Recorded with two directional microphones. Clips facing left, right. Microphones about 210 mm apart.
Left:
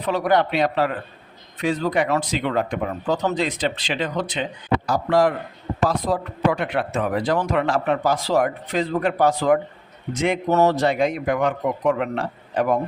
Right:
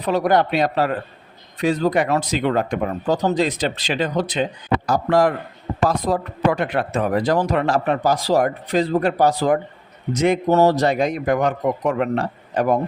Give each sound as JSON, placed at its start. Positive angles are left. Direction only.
{"t": 0.0, "sound": "a man's voice", "side_deg": -40}